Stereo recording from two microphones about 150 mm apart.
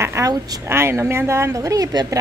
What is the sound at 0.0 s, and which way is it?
A woman's voice, 20° right (ahead or behind).